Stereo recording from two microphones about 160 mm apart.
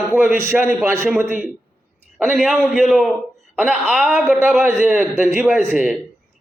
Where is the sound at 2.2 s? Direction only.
Centre (ahead or behind).